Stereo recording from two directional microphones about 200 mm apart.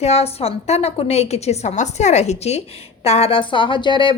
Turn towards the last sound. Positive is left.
turn(degrees=25)  # may be behind; listen again after turning